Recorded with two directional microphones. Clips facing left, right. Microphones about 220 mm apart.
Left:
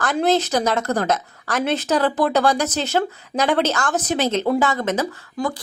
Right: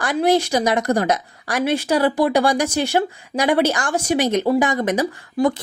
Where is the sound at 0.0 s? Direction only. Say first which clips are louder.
Right 1 dB; 10° right (ahead or behind).